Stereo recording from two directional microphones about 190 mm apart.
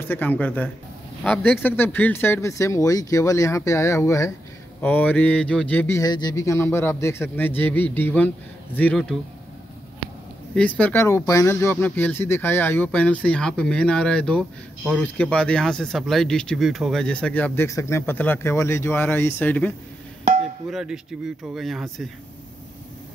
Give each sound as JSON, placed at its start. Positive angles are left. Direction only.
{"t": 0.0, "sound": "speech", "side_deg": 10}
{"t": 10.5, "sound": "speech", "side_deg": 5}
{"t": 20.7, "sound": "speech", "side_deg": -5}